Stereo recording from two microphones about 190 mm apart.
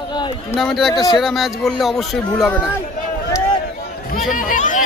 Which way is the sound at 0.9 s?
20° left (ahead or behind).